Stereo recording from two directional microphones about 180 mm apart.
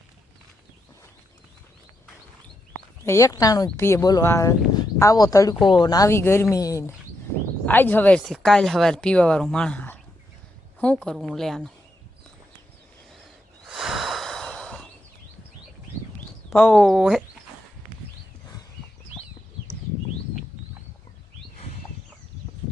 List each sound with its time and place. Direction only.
3.0 s speech: 15° left (ahead or behind)
13.7 s snort: 5° right (ahead or behind)
16.6 s speech: 5° left (ahead or behind)